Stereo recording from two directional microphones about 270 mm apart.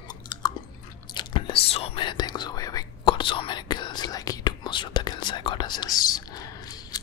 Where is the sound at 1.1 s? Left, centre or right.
Centre.